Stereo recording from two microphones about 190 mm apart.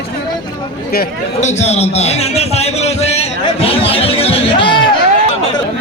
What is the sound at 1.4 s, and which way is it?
A man's voice, 35° left (ahead or behind).